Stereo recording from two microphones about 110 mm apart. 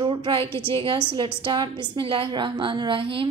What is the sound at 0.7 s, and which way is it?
A woman's voice, 45° right (ahead or behind).